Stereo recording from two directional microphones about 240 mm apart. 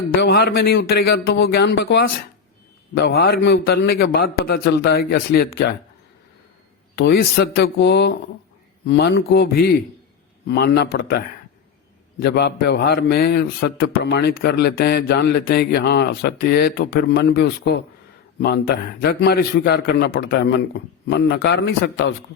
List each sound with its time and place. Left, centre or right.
0.2 s a man's voice: left
6.9 s a man's voice: left
12.2 s a man's voice: left